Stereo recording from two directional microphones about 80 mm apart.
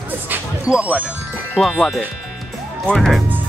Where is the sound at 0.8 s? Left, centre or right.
Centre.